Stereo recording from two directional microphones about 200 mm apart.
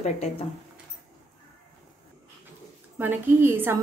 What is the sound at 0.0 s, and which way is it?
Speech, 35° left (ahead or behind).